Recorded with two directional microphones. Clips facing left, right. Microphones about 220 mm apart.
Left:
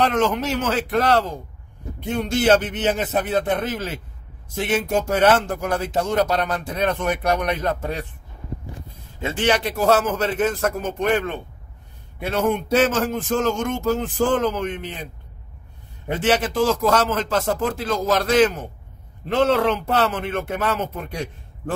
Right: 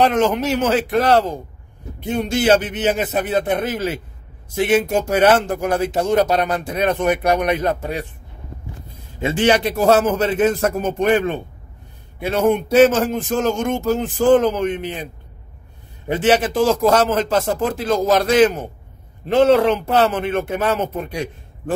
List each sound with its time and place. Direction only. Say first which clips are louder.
0.0 s speech: right 4 dB; 15° right (ahead or behind)
9.2 s speech: right 5 dB; 10° right (ahead or behind)
16.2 s speech: right 3 dB; 10° right (ahead or behind)